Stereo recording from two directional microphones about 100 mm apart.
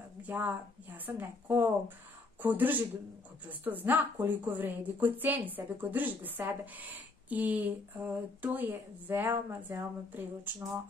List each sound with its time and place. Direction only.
0.3 s a woman's voice: 20° right (ahead or behind)